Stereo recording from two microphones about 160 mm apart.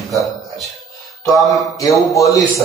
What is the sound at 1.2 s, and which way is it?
Speech, centre (ahead or behind).